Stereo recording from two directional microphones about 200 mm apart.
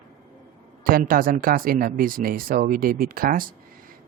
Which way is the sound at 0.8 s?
45° right (ahead or behind).